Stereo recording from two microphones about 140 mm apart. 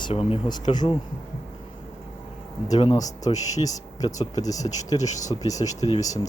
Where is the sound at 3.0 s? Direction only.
25° left (ahead or behind).